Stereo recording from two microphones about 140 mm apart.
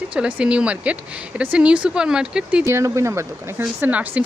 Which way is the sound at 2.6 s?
20° right (ahead or behind).